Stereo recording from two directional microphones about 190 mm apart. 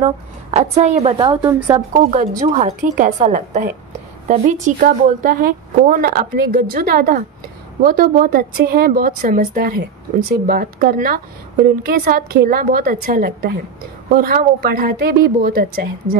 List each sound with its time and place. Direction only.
0.0 s a woman's voice: 35° right (ahead or behind)
1.1 s a woman's voice: 20° right (ahead or behind)
2.6 s a woman's voice: 40° right (ahead or behind)